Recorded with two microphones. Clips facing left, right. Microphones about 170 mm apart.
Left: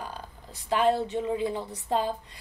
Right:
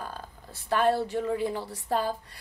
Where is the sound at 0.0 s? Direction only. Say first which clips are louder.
Even; 15° left (ahead or behind).